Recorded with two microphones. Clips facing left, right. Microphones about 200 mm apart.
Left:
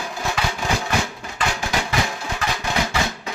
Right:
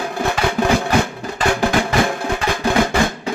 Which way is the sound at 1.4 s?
55° right (ahead or behind).